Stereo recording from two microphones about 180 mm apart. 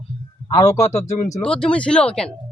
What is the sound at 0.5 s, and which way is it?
Speech, 20° left (ahead or behind).